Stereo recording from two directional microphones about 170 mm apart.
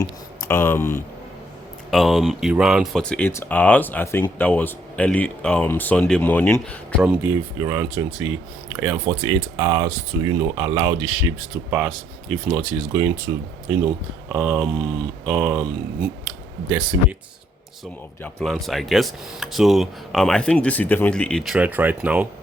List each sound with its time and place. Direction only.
0.4 s speech: 15° left (ahead or behind)
1.9 s speech: centre (ahead or behind)
7.0 s speech: 10° right (ahead or behind)
16.6 s speech: 10° right (ahead or behind)
18.2 s speech: 5° left (ahead or behind)